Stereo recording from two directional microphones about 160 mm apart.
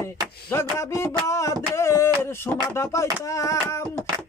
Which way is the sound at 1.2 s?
20° left (ahead or behind).